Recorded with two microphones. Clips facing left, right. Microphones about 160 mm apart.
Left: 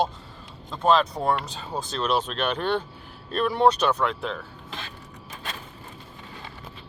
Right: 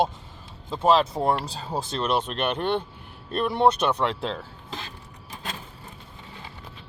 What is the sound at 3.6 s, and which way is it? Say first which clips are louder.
Speech: even; 25° right (ahead or behind).